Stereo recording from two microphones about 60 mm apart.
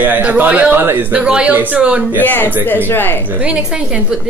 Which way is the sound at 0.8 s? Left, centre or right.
Right.